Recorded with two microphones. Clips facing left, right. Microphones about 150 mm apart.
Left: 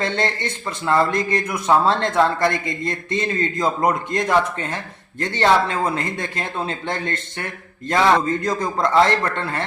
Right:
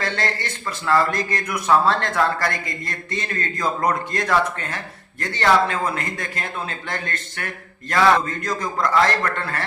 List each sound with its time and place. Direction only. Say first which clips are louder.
0.0 s a man's voice: left 3 dB; 25° left (ahead or behind)